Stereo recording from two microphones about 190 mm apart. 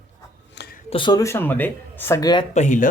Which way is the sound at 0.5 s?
60° left (ahead or behind).